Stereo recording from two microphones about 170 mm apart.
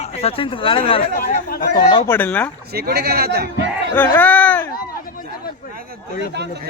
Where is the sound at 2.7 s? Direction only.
65° right (ahead or behind).